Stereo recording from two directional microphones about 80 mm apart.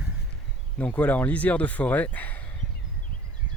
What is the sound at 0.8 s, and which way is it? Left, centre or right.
Speech, centre.